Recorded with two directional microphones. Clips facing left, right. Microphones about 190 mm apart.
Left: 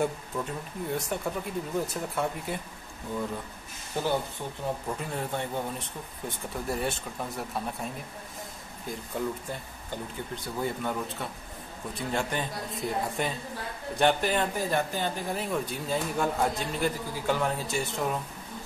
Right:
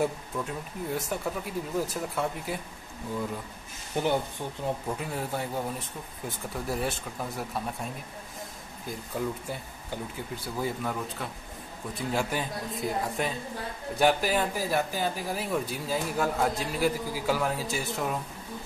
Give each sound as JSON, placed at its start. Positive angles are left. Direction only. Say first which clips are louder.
{"t": 0.0, "sound": "speech", "louder": "even", "side_deg": -5}
{"t": 3.9, "sound": "speech", "louder": "right 2 dB", "side_deg": -20}
{"t": 4.8, "sound": "speech", "louder": "even", "side_deg": -5}